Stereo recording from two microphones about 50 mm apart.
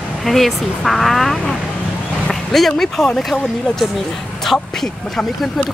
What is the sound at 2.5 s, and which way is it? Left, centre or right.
Speech, centre.